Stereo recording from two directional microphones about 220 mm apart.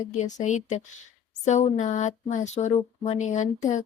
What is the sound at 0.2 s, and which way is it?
Speech, 35° left (ahead or behind).